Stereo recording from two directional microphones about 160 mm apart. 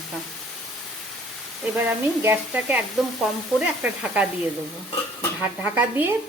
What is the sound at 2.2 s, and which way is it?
Speech, 10° right (ahead or behind).